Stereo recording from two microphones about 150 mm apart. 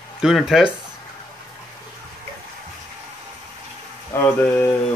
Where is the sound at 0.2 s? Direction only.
Centre (ahead or behind).